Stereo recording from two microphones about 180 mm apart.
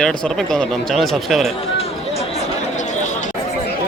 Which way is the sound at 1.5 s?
35° left (ahead or behind).